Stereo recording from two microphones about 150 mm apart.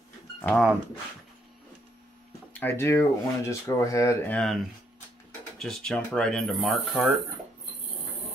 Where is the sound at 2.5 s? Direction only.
15° left (ahead or behind).